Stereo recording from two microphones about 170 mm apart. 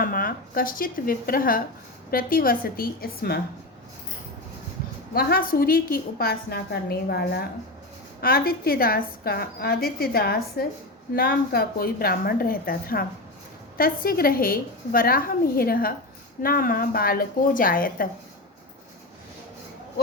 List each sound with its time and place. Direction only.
0.0 s a woman's voice: 60° left (ahead or behind)
5.1 s a woman's voice: 60° left (ahead or behind)